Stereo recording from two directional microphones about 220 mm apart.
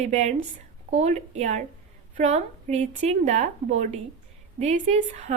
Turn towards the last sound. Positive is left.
turn(degrees=-30)  # may be behind; listen again after turning